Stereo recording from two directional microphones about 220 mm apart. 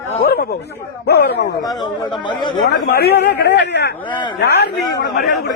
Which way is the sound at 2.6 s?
50° left (ahead or behind).